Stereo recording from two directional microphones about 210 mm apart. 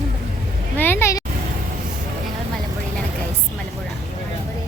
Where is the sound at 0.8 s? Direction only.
10° left (ahead or behind).